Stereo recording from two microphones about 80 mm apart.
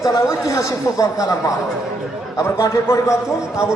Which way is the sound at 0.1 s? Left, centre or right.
Left.